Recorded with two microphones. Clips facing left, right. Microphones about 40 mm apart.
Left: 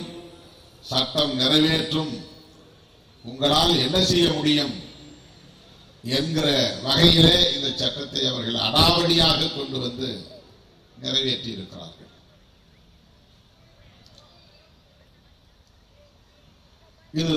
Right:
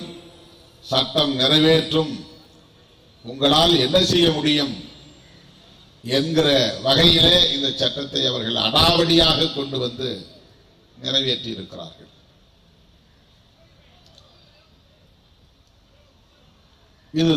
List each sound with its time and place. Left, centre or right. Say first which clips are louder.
0.0 s a sound: even; right
3.2 s a man's voice: right 4 dB; right
17.1 s a man's voice: right 7 dB; right